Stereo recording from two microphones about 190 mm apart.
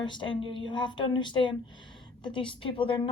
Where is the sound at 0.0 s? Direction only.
25° left (ahead or behind).